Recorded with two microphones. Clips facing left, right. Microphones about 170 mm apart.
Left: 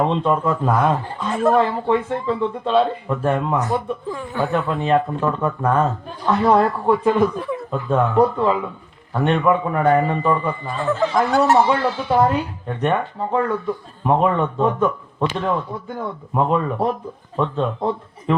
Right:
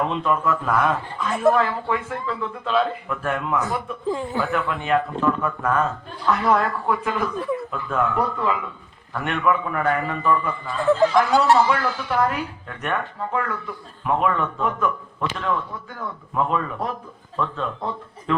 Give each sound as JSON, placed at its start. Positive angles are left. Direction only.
{"t": 0.0, "sound": "speech", "side_deg": 30}
{"t": 4.1, "sound": "speech", "side_deg": -25}
{"t": 4.4, "sound": "speech", "side_deg": 35}